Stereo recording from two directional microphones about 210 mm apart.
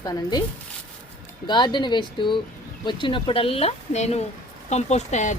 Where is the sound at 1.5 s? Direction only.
20° left (ahead or behind).